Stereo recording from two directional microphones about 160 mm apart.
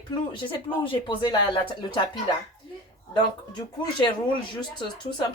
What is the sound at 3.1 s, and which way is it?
Speech, 25° left (ahead or behind).